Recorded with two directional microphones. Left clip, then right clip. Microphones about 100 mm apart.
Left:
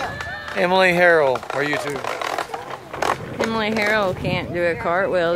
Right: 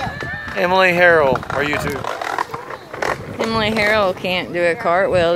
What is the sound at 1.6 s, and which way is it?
Speech, 15° right (ahead or behind).